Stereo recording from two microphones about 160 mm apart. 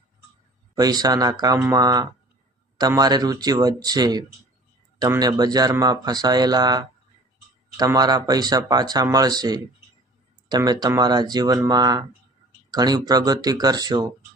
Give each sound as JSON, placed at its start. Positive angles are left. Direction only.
{"t": 0.8, "sound": "speech", "side_deg": -25}